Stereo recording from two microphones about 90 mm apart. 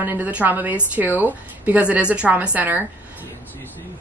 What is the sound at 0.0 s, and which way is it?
A woman's voice, 20° right (ahead or behind).